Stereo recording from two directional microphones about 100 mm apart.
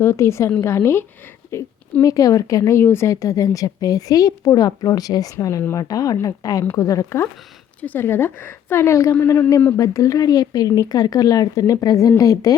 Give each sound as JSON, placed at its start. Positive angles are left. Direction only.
{"t": 0.0, "sound": "a woman's voice", "side_deg": 25}
{"t": 7.8, "sound": "a woman's voice", "side_deg": 20}
{"t": 9.7, "sound": "speech", "side_deg": 35}